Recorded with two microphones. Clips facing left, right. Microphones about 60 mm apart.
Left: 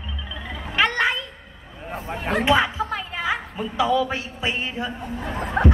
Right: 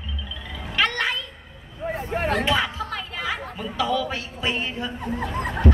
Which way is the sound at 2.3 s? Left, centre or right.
Centre.